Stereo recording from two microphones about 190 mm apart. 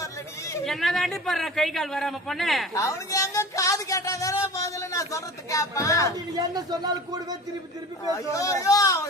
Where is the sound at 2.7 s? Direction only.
15° left (ahead or behind).